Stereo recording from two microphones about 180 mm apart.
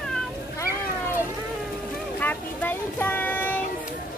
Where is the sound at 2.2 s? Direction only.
10° left (ahead or behind).